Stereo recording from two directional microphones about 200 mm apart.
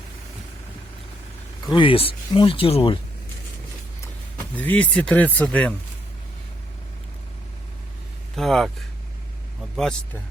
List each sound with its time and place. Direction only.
1.6 s speech: 25° left (ahead or behind)
4.5 s speech: 10° left (ahead or behind)
8.4 s speech: centre (ahead or behind)